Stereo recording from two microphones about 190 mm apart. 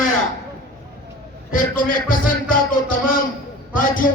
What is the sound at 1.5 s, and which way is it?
A man's voice, 45° left (ahead or behind).